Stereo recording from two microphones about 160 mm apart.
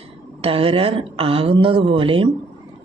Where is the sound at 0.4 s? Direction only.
35° right (ahead or behind).